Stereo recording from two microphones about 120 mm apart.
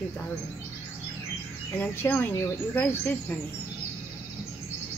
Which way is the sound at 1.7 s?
15° left (ahead or behind).